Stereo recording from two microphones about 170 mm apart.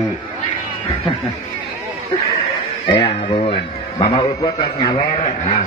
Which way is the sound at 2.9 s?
25° left (ahead or behind).